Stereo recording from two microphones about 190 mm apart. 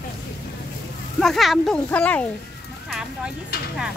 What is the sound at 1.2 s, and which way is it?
Speech, centre (ahead or behind).